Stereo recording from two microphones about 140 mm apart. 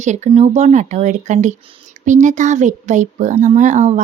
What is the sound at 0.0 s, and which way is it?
Speech, 55° right (ahead or behind).